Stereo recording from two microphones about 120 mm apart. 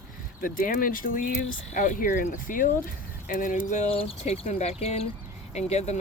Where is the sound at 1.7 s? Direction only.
90° left.